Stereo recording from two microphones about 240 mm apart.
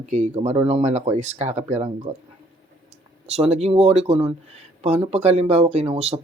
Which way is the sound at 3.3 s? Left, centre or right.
Right.